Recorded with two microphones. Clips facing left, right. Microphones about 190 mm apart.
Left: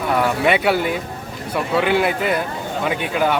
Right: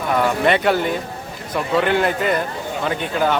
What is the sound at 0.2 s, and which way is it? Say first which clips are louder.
Speech: right 1 dB; 10° left (ahead or behind).